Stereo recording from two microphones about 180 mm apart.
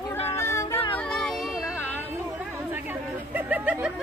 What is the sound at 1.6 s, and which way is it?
Music, 10° left (ahead or behind).